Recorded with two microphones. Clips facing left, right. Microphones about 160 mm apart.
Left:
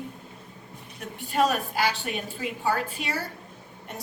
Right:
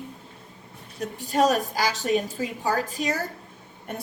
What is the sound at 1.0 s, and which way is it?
A woman's voice, 40° right (ahead or behind).